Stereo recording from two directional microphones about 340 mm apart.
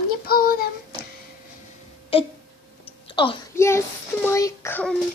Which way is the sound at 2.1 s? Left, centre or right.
Centre.